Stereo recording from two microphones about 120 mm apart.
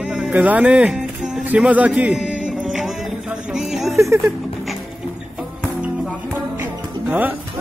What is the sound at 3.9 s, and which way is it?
Speech, 20° right (ahead or behind).